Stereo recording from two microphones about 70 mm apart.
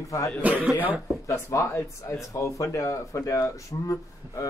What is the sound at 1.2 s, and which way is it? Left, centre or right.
Speech, left.